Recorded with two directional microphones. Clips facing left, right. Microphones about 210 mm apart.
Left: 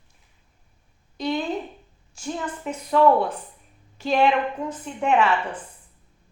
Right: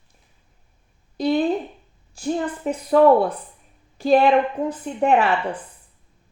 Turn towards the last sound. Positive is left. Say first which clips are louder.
# right 3 dB
turn(degrees=-35)  # may be behind; listen again after turning